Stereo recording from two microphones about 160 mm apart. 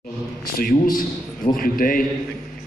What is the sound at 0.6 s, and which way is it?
A man's voice, 60° left (ahead or behind).